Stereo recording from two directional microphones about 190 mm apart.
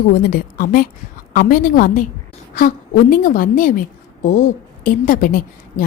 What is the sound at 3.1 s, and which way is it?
Speech, 45° left (ahead or behind).